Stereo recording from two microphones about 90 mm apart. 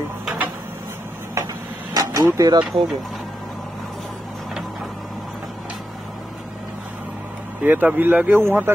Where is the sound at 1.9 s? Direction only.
45° right (ahead or behind).